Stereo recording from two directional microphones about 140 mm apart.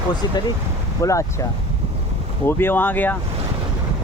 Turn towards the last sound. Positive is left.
turn(degrees=15)  # may be behind; listen again after turning